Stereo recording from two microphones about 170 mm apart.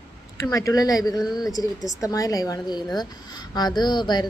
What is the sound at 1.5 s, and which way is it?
A woman's voice, 20° left (ahead or behind).